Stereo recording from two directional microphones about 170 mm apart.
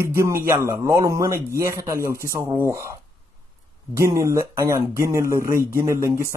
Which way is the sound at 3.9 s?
15° right (ahead or behind).